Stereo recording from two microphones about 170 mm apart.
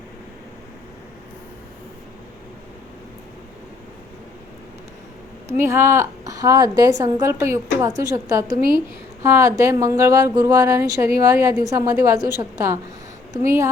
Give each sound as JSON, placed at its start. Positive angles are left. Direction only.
{"t": 5.6, "sound": "a woman's voice", "side_deg": -15}